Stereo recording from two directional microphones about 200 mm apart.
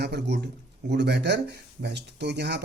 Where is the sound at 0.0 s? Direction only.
55° right (ahead or behind).